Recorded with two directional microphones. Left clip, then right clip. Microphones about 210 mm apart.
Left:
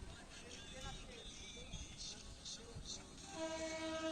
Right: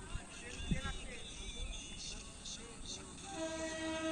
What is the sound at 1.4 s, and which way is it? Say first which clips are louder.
Vehicle: right 5 dB; 55° left (ahead or behind).